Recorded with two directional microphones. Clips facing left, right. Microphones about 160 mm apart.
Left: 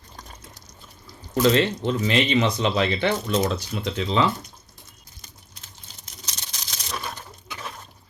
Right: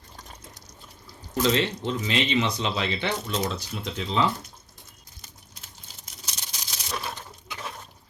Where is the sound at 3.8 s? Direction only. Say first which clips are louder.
Left 3 dB; 80° left.